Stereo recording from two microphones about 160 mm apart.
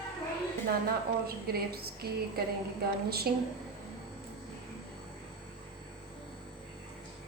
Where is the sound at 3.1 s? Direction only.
75° right (ahead or behind).